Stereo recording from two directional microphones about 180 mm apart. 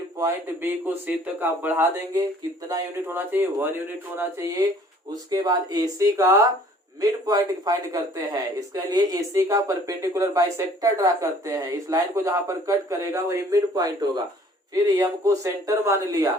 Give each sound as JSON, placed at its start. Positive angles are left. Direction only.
{"t": 0.2, "sound": "speech", "side_deg": -15}